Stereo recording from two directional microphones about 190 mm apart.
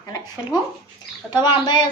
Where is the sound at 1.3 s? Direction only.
25° left (ahead or behind).